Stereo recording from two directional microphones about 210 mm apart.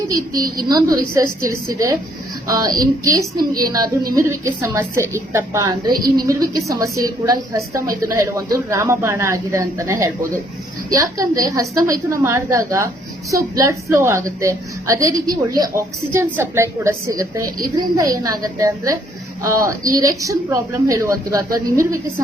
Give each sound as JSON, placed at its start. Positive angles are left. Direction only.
{"t": 0.5, "sound": "a woman's voice", "side_deg": -15}